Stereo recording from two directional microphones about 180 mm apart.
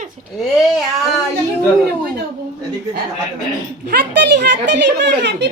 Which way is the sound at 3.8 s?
65° right (ahead or behind).